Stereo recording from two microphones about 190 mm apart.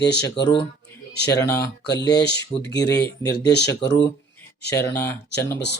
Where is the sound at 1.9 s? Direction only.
60° left (ahead or behind).